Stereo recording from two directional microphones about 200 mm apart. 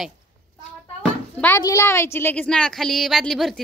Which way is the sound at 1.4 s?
15° left (ahead or behind).